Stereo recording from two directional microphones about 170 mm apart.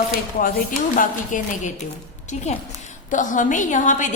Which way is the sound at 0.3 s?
60° left (ahead or behind).